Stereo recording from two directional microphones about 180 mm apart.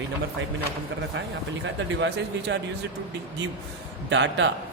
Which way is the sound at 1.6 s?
85° right.